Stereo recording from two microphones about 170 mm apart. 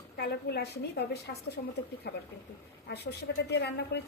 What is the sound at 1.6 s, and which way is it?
Speech, 50° left (ahead or behind).